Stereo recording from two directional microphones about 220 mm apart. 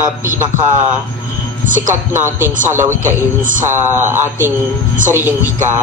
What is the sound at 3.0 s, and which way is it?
Speech, 35° right (ahead or behind).